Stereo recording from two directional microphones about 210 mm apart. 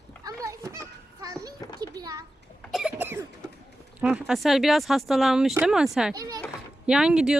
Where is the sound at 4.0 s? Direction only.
5° right (ahead or behind).